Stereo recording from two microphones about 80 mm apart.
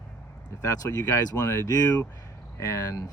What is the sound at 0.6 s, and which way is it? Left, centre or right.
Speech, left.